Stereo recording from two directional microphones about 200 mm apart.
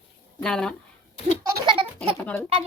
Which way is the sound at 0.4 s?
5° left (ahead or behind).